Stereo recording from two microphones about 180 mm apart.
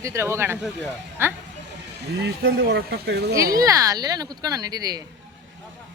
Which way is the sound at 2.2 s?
65° right (ahead or behind).